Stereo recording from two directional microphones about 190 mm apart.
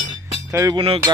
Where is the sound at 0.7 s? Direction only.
30° right (ahead or behind).